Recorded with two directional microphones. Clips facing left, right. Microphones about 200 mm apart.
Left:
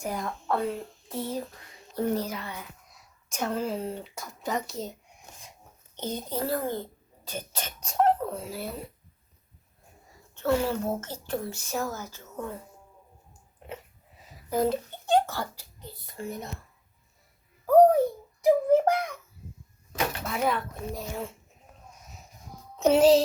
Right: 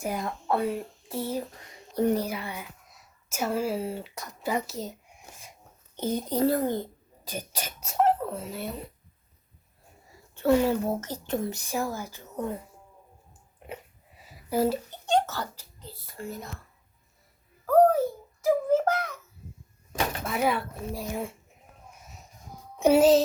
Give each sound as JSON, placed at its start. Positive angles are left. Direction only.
{"t": 0.0, "sound": "a woman's voice", "side_deg": -10}
{"t": 6.0, "sound": "speech", "side_deg": -10}
{"t": 6.4, "sound": "a child's voice", "side_deg": -20}
{"t": 10.3, "sound": "speech", "side_deg": -15}
{"t": 14.3, "sound": "a sound", "side_deg": -5}
{"t": 15.1, "sound": "a child's voice", "side_deg": 10}
{"t": 18.4, "sound": "child singing", "side_deg": 15}
{"t": 20.2, "sound": "speech", "side_deg": -5}
{"t": 22.8, "sound": "music", "side_deg": -5}